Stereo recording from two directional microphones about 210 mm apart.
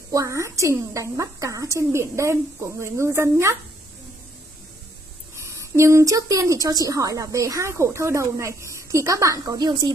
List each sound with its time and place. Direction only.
0.1 s speech: 15° right (ahead or behind)
5.4 s speech: 15° right (ahead or behind)